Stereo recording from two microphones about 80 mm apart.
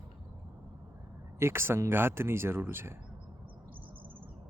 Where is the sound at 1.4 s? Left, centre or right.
Right.